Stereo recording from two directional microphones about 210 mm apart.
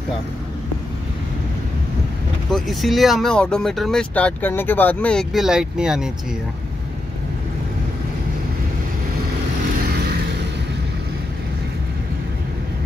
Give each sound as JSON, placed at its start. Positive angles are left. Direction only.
{"t": 2.5, "sound": "speech", "side_deg": 0}